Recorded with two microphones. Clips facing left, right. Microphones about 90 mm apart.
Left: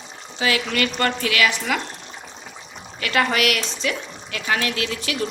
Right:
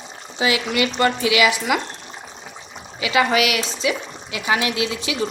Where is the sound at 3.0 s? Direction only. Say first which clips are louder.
Right 2 dB; 5° right (ahead or behind).